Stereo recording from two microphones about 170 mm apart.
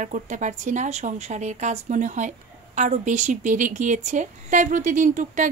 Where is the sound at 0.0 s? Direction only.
45° right (ahead or behind).